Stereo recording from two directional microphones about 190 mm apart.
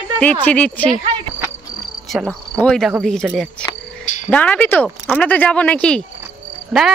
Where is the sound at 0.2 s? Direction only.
5° left (ahead or behind).